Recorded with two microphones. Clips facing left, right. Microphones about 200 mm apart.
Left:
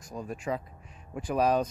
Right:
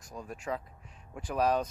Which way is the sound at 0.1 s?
15° left (ahead or behind).